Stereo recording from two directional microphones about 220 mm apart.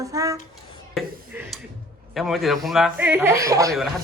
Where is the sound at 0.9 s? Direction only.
5° right (ahead or behind).